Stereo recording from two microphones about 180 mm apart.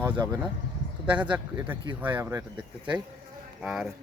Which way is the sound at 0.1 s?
20° right (ahead or behind).